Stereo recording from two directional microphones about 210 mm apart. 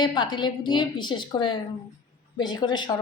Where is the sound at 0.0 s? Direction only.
20° left (ahead or behind).